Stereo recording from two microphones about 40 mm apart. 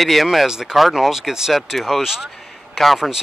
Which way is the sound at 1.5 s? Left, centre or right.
Centre.